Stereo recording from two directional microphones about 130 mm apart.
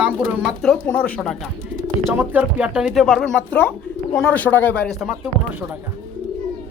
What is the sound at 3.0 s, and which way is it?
Speech, 5° left (ahead or behind).